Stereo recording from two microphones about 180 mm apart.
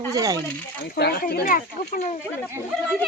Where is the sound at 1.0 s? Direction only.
55° left (ahead or behind).